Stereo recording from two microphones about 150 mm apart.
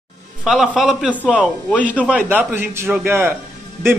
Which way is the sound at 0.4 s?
5° right (ahead or behind).